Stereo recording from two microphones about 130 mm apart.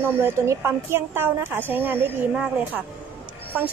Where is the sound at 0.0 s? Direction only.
15° right (ahead or behind).